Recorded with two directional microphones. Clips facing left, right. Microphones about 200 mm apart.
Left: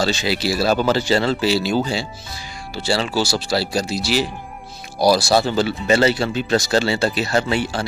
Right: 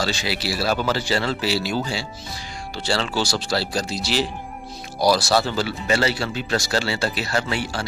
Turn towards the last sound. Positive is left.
turn(degrees=20)  # may be behind; listen again after turning